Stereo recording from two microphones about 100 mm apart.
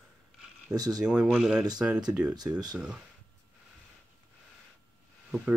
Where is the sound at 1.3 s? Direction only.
5° right (ahead or behind).